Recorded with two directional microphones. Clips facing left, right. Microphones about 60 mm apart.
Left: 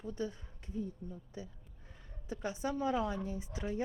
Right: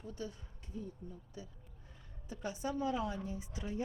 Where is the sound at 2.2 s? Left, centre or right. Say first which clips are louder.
Left 2 dB; left.